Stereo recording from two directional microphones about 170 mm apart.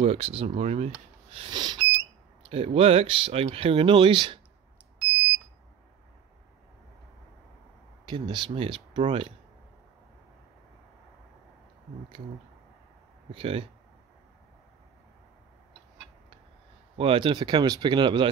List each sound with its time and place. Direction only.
0.0 s speech: 40° right (ahead or behind)
8.1 s speech: 25° right (ahead or behind)
13.3 s speech: 35° right (ahead or behind)
16.9 s speech: 30° right (ahead or behind)